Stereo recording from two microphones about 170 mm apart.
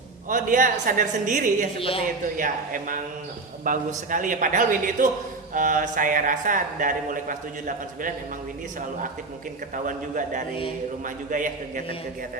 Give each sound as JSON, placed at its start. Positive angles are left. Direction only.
{"t": 0.3, "sound": "speech", "side_deg": -50}
{"t": 1.8, "sound": "speech", "side_deg": 35}
{"t": 2.4, "sound": "speech", "side_deg": -50}
{"t": 9.7, "sound": "speech", "side_deg": -50}